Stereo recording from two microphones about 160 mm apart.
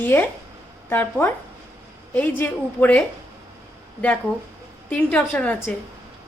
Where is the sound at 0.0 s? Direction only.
10° left (ahead or behind).